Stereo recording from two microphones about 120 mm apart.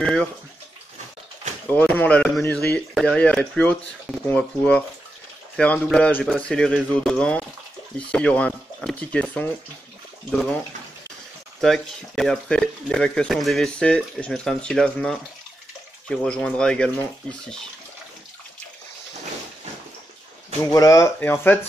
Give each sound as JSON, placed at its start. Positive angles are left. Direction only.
{"t": 0.0, "sound": "speech", "side_deg": 10}
{"t": 1.7, "sound": "speech", "side_deg": 15}
{"t": 11.6, "sound": "speech", "side_deg": 5}
{"t": 20.6, "sound": "speech", "side_deg": 30}
{"t": 21.2, "sound": "speech", "side_deg": 15}